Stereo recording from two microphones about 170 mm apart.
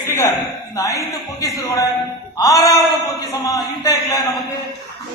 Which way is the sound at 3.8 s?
20° left (ahead or behind).